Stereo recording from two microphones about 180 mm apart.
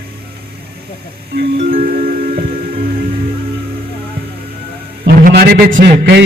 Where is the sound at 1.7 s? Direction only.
55° right (ahead or behind).